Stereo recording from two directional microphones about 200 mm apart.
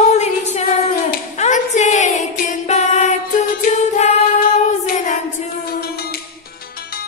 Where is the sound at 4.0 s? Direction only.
40° left (ahead or behind).